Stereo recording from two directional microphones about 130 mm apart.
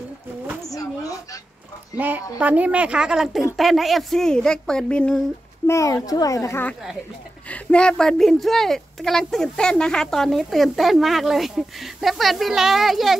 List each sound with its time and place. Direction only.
0.7 s a sound: 25° left (ahead or behind)
2.0 s a woman's voice: 15° right (ahead or behind); by 5.2 s 10° left (ahead or behind)
5.7 s speech: 25° left (ahead or behind)
7.4 s speech: 10° left (ahead or behind)